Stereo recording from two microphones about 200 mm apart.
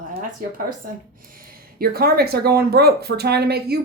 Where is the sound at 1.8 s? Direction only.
50° right (ahead or behind).